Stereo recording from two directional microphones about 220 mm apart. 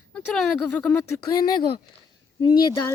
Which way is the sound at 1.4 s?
20° left (ahead or behind).